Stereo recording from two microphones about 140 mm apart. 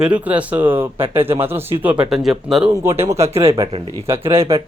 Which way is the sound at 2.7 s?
20° right (ahead or behind).